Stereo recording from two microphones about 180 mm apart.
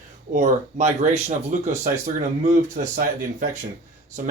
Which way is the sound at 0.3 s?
40° right (ahead or behind).